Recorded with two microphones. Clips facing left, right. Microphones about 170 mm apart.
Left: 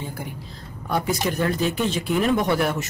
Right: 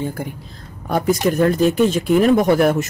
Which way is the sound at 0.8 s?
45° right (ahead or behind).